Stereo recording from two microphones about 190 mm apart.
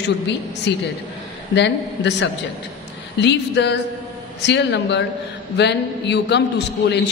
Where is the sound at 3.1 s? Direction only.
65° left (ahead or behind).